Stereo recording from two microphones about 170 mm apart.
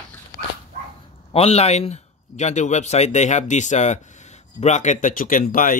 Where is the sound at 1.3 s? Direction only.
35° left (ahead or behind).